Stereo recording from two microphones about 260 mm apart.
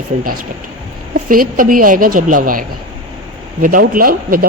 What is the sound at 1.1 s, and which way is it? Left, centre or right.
Speech, right.